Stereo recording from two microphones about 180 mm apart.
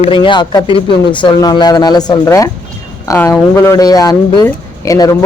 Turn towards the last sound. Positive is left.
turn(degrees=20)  # may be behind; listen again after turning